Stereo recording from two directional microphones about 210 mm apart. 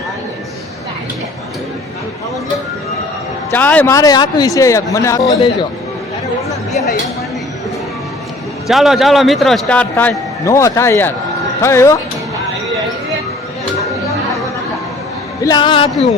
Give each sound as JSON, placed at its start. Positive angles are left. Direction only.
{"t": 3.5, "sound": "speech", "side_deg": 10}
{"t": 8.6, "sound": "a man's voice", "side_deg": 0}
{"t": 15.4, "sound": "speech", "side_deg": 20}